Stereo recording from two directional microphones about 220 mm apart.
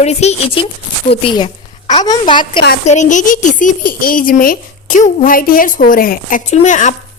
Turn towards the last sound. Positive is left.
turn(degrees=35)  # may be behind; listen again after turning